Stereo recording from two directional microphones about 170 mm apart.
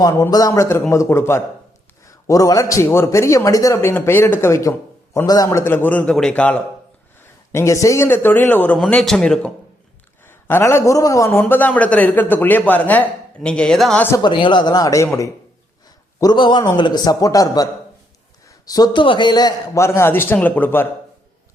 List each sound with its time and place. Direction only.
0.0 s a man's voice: 20° left (ahead or behind)
7.5 s a man's voice: 15° left (ahead or behind)
14.2 s a man's voice: 30° left (ahead or behind); by 20.8 s 10° left (ahead or behind)